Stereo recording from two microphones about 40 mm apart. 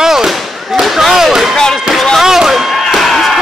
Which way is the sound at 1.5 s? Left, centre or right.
Centre.